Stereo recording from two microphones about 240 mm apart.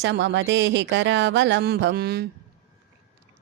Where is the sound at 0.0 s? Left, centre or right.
Right.